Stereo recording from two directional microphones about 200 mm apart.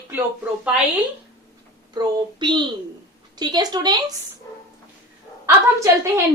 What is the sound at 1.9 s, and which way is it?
A woman's voice, 20° right (ahead or behind).